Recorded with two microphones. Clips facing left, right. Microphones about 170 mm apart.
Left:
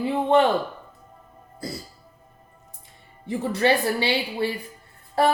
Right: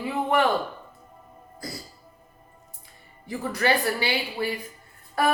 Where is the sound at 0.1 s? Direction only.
25° left (ahead or behind).